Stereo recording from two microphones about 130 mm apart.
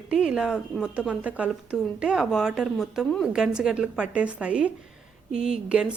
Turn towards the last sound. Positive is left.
turn(degrees=-5)  # may be behind; listen again after turning